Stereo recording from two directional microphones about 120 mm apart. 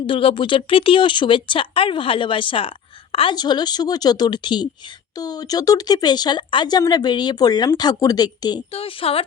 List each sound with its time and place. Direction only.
0.0 s speech: 50° left (ahead or behind)
3.3 s speech: 35° left (ahead or behind)
8.7 s speech: 50° left (ahead or behind)